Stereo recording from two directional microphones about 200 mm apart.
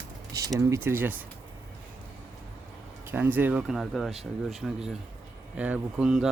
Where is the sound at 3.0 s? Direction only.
10° right (ahead or behind).